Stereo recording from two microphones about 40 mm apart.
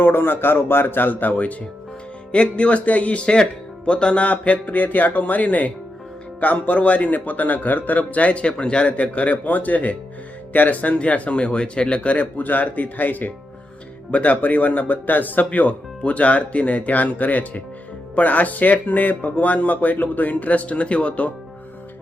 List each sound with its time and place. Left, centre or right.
0.0 s speech: left
2.3 s a man's voice: left
14.1 s a man's voice: left